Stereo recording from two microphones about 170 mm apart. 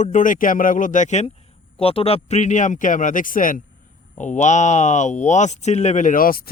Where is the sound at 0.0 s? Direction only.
50° left (ahead or behind).